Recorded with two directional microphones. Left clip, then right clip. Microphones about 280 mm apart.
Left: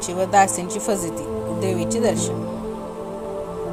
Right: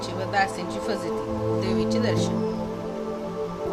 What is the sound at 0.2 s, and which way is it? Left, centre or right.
A woman's voice, left.